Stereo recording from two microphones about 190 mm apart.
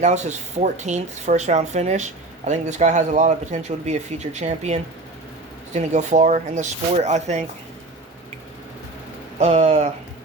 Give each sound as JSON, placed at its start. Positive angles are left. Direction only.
{"t": 0.0, "sound": "speech", "side_deg": -35}
{"t": 9.4, "sound": "speech", "side_deg": -35}